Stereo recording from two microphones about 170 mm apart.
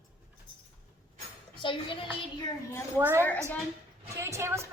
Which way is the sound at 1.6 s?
30° left (ahead or behind).